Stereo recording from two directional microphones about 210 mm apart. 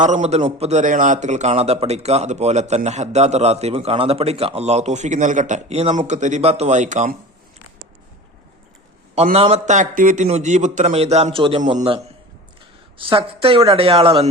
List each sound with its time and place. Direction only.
0.0 s a man's voice: 35° right (ahead or behind)
9.1 s a man's voice: 30° right (ahead or behind)